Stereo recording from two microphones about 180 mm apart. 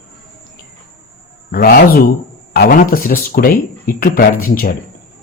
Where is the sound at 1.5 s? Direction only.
55° left (ahead or behind).